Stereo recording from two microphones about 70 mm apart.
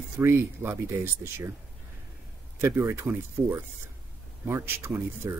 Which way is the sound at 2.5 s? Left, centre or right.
Right.